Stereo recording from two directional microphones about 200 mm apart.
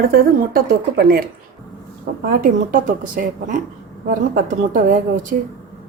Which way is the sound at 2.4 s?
40° right (ahead or behind).